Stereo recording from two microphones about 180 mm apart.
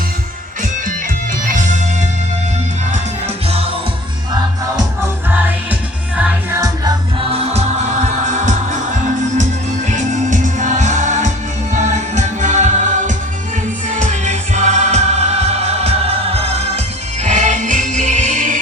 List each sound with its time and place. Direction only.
6.1 s music: 10° right (ahead or behind)
7.2 s music: 30° right (ahead or behind)